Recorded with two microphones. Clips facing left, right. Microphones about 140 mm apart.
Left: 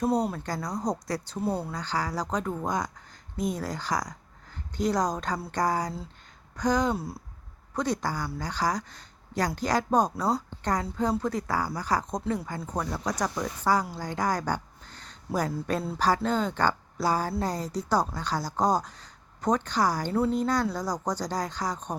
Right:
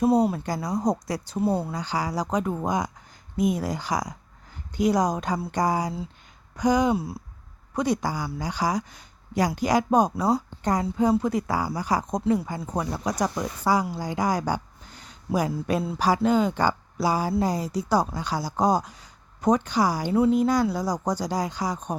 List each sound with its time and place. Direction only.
0.0 s speech: 5° right (ahead or behind)